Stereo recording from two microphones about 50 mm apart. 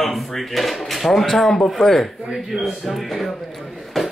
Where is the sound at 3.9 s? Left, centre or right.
Centre.